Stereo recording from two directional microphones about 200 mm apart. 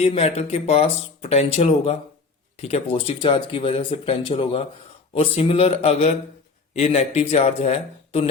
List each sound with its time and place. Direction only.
0.0 s speech: 30° left (ahead or behind)